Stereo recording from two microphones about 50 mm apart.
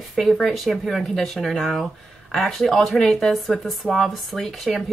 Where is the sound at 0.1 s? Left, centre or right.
Centre.